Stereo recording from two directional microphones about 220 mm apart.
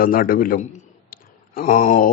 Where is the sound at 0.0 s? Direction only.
40° left (ahead or behind).